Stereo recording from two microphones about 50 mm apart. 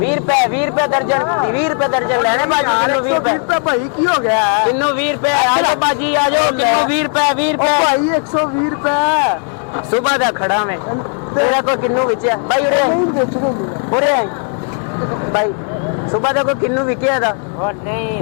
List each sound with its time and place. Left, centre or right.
0.0 s a man's voice: centre
16.1 s a man's voice: centre